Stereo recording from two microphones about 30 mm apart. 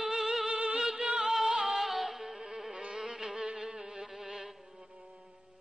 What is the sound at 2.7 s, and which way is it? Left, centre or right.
Music, right.